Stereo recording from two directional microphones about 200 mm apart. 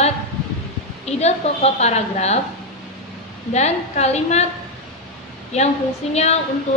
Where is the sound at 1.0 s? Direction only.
35° left (ahead or behind).